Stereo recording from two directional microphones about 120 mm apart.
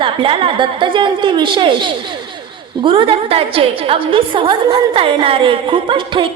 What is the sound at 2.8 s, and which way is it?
A woman's voice, 50° right (ahead or behind).